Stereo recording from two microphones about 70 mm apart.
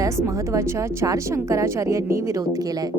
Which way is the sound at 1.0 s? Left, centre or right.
Right.